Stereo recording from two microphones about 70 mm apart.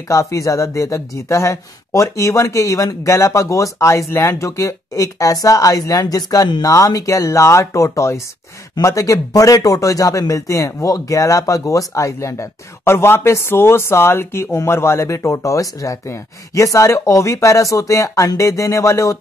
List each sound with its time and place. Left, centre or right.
0.1 s speech: left
4.5 s speech: left